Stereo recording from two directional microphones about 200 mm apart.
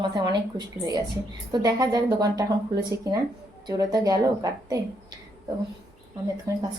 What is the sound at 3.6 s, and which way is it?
A woman's voice, 20° right (ahead or behind).